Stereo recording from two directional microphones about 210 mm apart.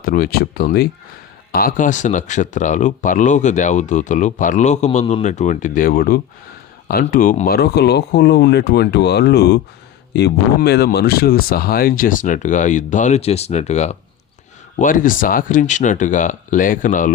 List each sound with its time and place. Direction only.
0.0 s speech: 45° left (ahead or behind)